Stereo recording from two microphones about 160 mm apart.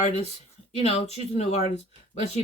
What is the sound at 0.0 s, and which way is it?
Speech, 45° left (ahead or behind).